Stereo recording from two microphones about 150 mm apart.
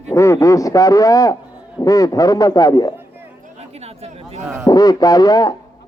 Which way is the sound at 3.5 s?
45° right (ahead or behind).